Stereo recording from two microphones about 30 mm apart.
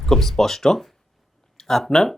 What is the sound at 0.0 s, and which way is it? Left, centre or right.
Speech, centre.